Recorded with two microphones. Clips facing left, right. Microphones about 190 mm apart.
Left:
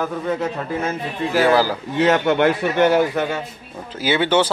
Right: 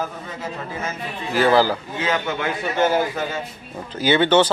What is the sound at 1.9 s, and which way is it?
A man's voice, 70° left (ahead or behind).